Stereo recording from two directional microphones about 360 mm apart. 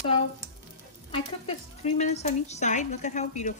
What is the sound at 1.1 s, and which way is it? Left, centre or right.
A woman's voice, centre.